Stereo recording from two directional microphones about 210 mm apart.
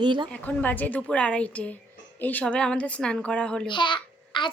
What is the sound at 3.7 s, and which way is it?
Speech, 20° left (ahead or behind).